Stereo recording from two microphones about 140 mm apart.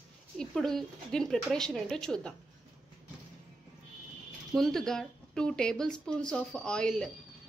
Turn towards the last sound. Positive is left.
turn(degrees=5)  # may be behind; listen again after turning